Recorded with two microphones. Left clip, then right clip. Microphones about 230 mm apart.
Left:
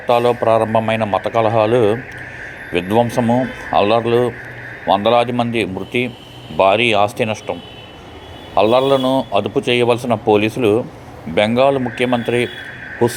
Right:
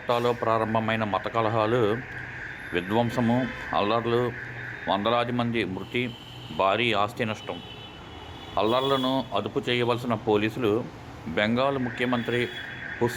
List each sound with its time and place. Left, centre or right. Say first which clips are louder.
0.1 s a man's voice: left 11 dB; centre
8.5 s a man's voice: left 11 dB; centre